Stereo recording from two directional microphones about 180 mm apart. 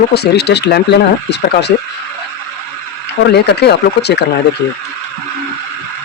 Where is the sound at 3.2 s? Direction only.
65° left (ahead or behind).